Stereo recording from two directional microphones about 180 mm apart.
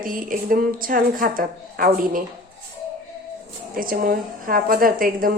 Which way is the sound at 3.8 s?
55° right (ahead or behind).